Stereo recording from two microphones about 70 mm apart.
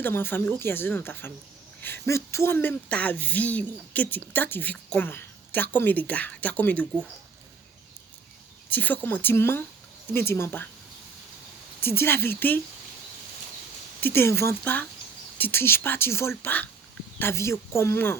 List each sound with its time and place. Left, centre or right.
0.0 s speech: left
2.0 s speech: left
8.7 s speech: left
11.8 s speech: left
14.0 s speech: left
14.6 s speech: left